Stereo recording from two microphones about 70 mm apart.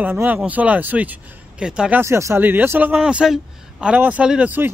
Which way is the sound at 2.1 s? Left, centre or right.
Right.